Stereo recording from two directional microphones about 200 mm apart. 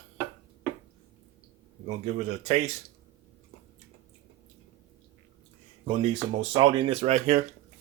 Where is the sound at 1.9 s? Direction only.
35° right (ahead or behind).